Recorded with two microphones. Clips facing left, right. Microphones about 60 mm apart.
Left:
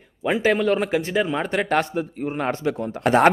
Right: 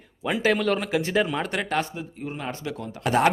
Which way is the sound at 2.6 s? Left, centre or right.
Left.